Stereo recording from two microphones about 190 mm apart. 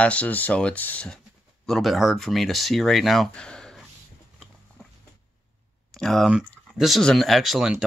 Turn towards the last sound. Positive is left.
turn(degrees=0)  # may be behind; listen again after turning